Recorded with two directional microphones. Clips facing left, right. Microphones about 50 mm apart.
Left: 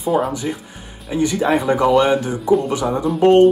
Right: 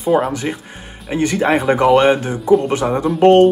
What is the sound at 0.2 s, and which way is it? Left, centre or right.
Speech, right.